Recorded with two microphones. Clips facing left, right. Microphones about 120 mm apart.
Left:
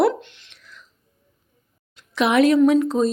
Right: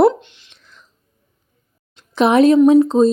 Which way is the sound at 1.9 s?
30° right (ahead or behind).